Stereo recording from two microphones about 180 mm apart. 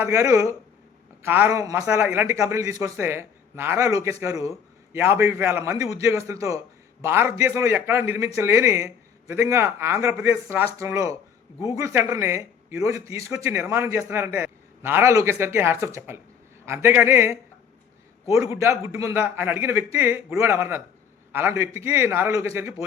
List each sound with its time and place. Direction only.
0.0 s speech: 15° right (ahead or behind)
18.5 s speech: 15° right (ahead or behind)